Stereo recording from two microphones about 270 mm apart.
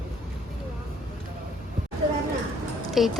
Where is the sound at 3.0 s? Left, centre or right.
Centre.